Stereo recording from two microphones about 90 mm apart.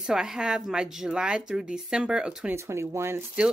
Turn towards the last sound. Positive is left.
turn(degrees=-30)  # may be behind; listen again after turning